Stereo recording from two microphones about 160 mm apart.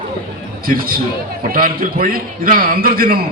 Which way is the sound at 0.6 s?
65° right (ahead or behind).